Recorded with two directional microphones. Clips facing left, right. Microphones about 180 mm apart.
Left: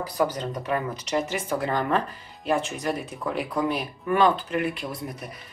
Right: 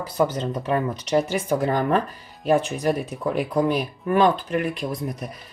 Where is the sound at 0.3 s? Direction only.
25° right (ahead or behind).